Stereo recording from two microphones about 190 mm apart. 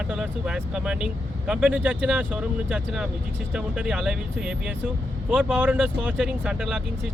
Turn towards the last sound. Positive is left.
turn(degrees=-5)  # may be behind; listen again after turning